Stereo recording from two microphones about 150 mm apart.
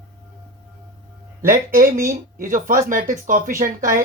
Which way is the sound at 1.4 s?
70° right (ahead or behind).